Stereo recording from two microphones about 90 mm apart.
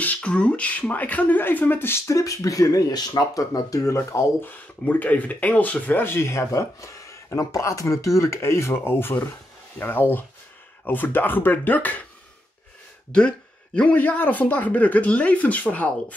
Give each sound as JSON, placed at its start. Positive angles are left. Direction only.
{"t": 0.0, "sound": "speech", "side_deg": 15}
{"t": 2.0, "sound": "speech", "side_deg": 35}
{"t": 4.5, "sound": "speech", "side_deg": 20}
{"t": 13.7, "sound": "speech", "side_deg": 15}